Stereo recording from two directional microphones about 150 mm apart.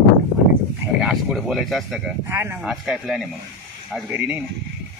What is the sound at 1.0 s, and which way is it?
Speech, centre (ahead or behind).